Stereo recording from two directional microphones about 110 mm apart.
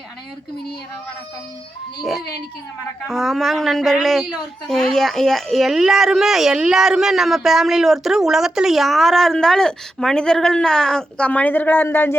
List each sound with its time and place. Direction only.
3.1 s speech: centre (ahead or behind); by 12.1 s 20° left (ahead or behind)